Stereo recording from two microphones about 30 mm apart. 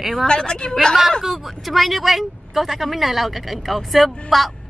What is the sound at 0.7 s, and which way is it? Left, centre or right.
Speech, centre.